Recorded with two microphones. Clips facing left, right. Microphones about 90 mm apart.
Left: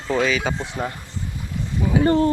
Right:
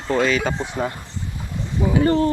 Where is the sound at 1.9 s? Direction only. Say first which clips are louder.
Left 1 dB; 25° left (ahead or behind).